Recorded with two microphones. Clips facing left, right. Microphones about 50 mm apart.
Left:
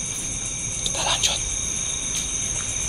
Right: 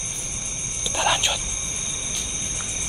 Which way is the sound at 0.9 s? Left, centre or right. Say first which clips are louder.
Right 4 dB; right.